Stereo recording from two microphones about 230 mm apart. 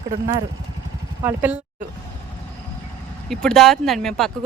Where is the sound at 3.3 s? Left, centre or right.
Centre.